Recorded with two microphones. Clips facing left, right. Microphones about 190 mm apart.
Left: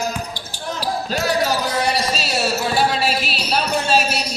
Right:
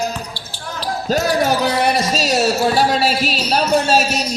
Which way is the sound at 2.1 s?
40° right (ahead or behind).